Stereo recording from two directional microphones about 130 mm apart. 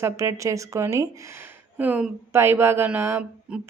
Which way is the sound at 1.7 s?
15° right (ahead or behind).